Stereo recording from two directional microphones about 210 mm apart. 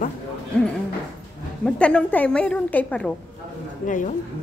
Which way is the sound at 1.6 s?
5° left (ahead or behind).